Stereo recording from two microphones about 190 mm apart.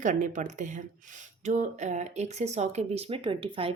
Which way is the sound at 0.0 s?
40° right (ahead or behind).